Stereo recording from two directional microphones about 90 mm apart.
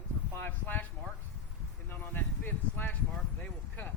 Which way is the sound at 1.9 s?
20° left (ahead or behind).